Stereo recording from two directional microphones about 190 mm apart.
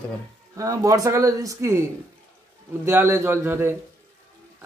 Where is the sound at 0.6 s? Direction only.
15° right (ahead or behind).